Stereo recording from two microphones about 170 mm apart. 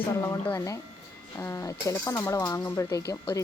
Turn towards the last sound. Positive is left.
turn(degrees=20)  # may be behind; listen again after turning